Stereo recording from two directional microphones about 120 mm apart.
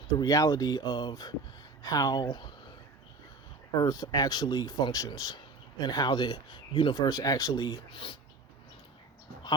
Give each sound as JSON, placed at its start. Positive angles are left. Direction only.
{"t": 0.2, "sound": "speech", "side_deg": 30}
{"t": 3.8, "sound": "speech", "side_deg": 35}